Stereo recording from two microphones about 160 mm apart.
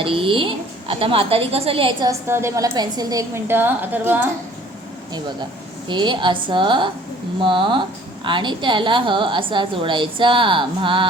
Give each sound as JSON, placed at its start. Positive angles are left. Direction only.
{"t": 0.0, "sound": "a woman's voice", "side_deg": -35}
{"t": 2.0, "sound": "a woman's voice", "side_deg": -15}
{"t": 5.9, "sound": "a woman's voice", "side_deg": -30}